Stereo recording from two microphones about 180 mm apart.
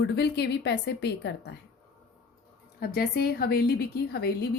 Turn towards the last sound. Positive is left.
turn(degrees=65)  # may be behind; listen again after turning